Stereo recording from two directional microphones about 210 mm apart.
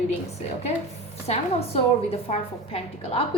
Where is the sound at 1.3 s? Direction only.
30° left (ahead or behind).